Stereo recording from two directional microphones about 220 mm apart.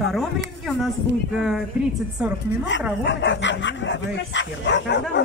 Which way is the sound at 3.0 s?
55° left (ahead or behind).